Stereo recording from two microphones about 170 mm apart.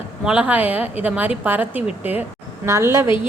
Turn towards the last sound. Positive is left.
turn(degrees=-15)  # may be behind; listen again after turning